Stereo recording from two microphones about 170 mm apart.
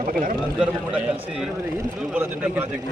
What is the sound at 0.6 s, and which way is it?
A man's voice, 5° right (ahead or behind).